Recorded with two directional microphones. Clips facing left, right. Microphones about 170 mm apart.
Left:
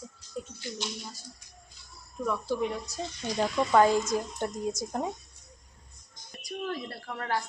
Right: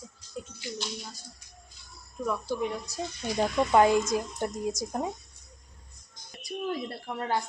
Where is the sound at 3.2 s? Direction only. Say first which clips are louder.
Right 1 dB; 15° right (ahead or behind).